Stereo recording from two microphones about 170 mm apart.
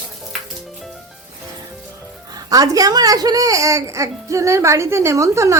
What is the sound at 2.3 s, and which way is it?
A woman's voice, 20° right (ahead or behind).